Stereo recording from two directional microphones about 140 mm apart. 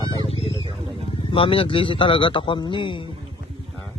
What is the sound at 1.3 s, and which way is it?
Speech, 40° left (ahead or behind).